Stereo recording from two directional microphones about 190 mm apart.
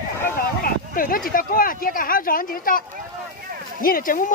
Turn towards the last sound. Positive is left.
turn(degrees=45)  # may be behind; listen again after turning